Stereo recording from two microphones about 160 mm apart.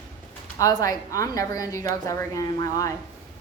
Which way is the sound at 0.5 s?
20° left (ahead or behind).